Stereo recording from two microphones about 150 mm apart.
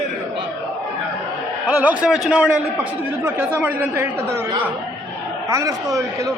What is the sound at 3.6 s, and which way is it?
Speech, 15° right (ahead or behind).